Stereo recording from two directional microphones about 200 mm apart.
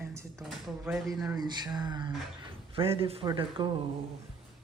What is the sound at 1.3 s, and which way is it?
A man's voice, 20° right (ahead or behind).